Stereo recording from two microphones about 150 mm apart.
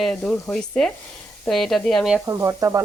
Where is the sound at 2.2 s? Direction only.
20° right (ahead or behind).